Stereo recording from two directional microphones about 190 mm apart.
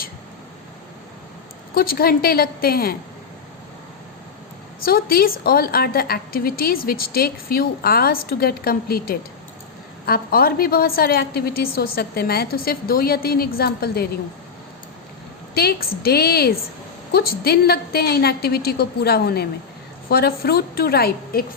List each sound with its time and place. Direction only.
1.7 s a woman's voice: 50° left (ahead or behind)
4.8 s a woman's voice: 50° left (ahead or behind)
15.5 s a woman's voice: 55° left (ahead or behind)